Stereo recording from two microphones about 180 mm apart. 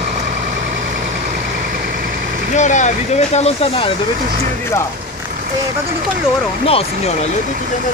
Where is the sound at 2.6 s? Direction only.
40° left (ahead or behind).